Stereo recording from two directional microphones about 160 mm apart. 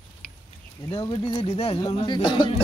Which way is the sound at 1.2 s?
35° left (ahead or behind).